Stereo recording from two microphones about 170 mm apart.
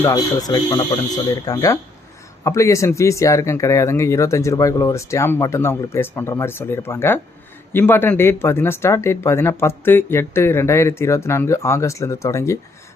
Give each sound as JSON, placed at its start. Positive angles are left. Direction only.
{"t": 0.0, "sound": "speech", "side_deg": 20}